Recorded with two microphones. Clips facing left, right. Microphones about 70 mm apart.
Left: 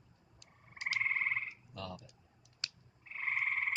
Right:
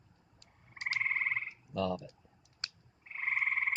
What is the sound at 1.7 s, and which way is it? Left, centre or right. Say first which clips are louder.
Speech: right 16 dB; right.